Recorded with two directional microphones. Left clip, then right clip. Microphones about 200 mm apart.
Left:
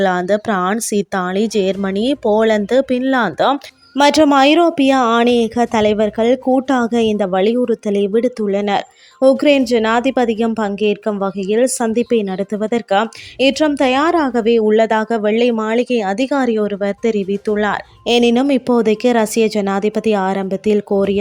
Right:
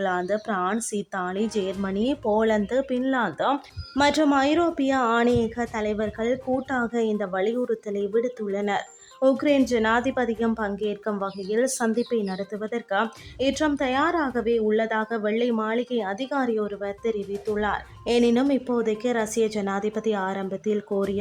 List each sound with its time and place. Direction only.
0.0 s speech: 35° left (ahead or behind)